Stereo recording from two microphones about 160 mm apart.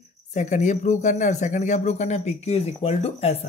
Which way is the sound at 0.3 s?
50° left (ahead or behind).